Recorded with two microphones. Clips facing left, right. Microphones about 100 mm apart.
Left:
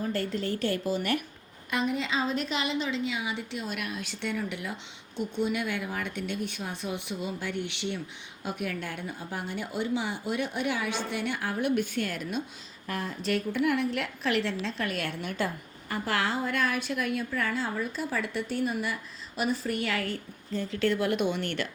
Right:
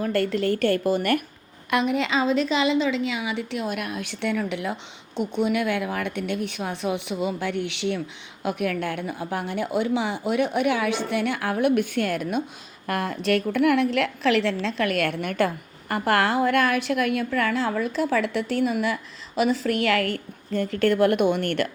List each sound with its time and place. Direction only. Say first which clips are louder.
0.0 s a woman's voice: right 7 dB; 70° right (ahead or behind); by 1.2 s 55° right (ahead or behind)
1.7 s a woman's voice: right 6 dB; 75° right (ahead or behind)
3.7 s a woman's voice: right 6 dB; 50° right (ahead or behind); by 8.0 s 80° right
8.4 s a woman's voice: right 8 dB; 70° right (ahead or behind); by 12.4 s 55° right (ahead or behind)
12.9 s a woman's voice: right 7 dB; 65° right (ahead or behind)